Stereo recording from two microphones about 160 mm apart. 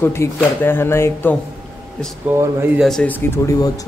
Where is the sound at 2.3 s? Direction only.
15° right (ahead or behind).